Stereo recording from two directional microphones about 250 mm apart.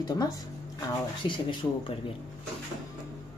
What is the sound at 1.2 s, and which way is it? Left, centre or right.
Speech, centre.